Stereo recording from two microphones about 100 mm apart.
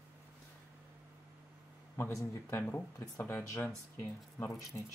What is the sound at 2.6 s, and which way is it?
Speech, 25° left (ahead or behind).